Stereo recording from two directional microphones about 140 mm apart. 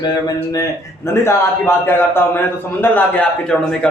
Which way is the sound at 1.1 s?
20° left (ahead or behind).